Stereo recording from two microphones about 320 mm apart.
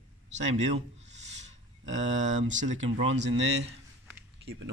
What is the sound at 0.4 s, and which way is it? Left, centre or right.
Speech, right.